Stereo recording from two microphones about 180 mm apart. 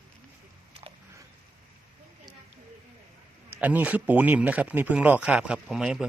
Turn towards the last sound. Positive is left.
turn(degrees=-5)  # may be behind; listen again after turning